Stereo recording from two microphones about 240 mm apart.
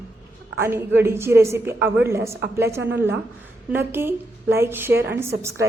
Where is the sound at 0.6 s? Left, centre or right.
Centre.